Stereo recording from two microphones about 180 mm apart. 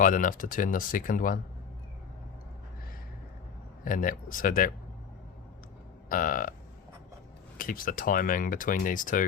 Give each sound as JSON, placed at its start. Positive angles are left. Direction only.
{"t": 0.0, "sound": "speech", "side_deg": 50}
{"t": 3.8, "sound": "speech", "side_deg": 50}
{"t": 6.1, "sound": "speech", "side_deg": 50}
{"t": 7.6, "sound": "speech", "side_deg": 50}